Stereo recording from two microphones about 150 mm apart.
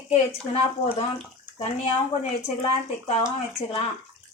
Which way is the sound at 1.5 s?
40° left (ahead or behind).